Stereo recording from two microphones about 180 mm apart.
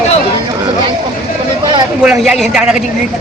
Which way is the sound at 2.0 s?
5° right (ahead or behind).